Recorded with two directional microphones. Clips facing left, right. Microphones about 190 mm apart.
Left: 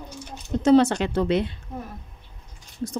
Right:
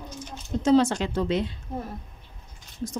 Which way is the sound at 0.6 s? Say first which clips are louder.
Left 3 dB; 65° left (ahead or behind).